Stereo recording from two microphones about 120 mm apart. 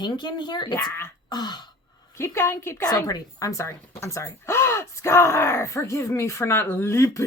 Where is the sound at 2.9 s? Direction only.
30° left (ahead or behind).